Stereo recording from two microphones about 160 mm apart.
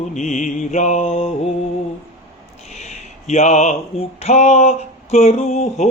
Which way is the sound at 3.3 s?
45° left (ahead or behind).